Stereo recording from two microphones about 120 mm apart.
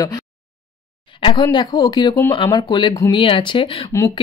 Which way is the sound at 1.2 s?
40° left (ahead or behind).